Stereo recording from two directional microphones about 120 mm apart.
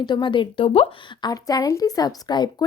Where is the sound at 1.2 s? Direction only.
30° left (ahead or behind).